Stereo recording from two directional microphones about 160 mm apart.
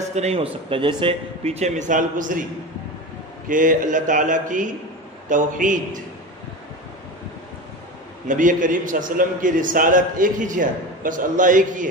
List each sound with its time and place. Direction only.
0.1 s speech: 40° right (ahead or behind)
3.4 s speech: 55° right (ahead or behind)
8.3 s a man's voice: 55° right (ahead or behind)